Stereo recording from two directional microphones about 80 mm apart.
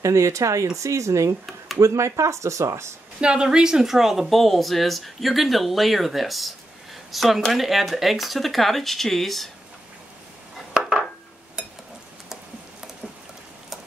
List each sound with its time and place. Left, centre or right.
0.0 s speech: right
3.2 s speech: centre
10.7 s dishes: centre